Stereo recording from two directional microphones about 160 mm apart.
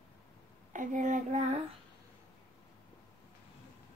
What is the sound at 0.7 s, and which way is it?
Child singing, 50° right (ahead or behind).